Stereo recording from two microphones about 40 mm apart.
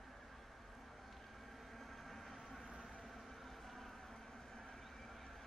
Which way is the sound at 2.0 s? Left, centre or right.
Centre.